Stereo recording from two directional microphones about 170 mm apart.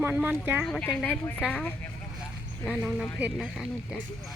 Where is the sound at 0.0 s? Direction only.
10° right (ahead or behind).